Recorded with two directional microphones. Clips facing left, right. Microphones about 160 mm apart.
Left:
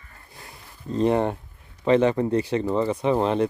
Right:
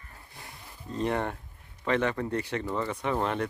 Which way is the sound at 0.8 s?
25° left (ahead or behind).